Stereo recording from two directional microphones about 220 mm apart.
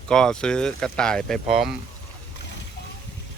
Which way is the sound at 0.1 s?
5° left (ahead or behind).